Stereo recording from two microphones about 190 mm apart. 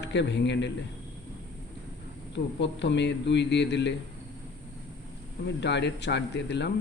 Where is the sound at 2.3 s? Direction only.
70° left (ahead or behind).